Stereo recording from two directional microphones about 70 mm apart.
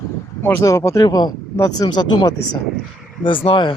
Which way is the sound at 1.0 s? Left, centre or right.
Left.